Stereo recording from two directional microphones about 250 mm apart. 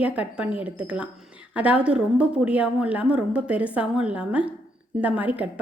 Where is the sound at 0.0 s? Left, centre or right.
Centre.